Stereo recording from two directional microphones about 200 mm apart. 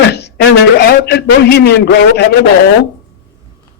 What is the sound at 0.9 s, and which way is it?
A man's voice, 55° left (ahead or behind).